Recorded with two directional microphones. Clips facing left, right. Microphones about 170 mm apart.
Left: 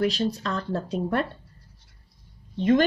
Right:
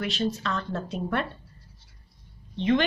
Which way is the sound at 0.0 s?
35° left (ahead or behind).